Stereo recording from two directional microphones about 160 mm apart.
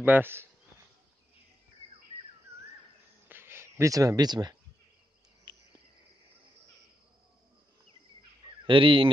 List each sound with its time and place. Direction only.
0.0 s speech: 10° right (ahead or behind)
3.3 s a sound: 15° right (ahead or behind)
5.5 s cricket: 30° right (ahead or behind)
8.6 s speech: 35° right (ahead or behind)